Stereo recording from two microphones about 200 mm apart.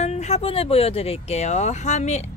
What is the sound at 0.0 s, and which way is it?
A woman's voice, 35° left (ahead or behind).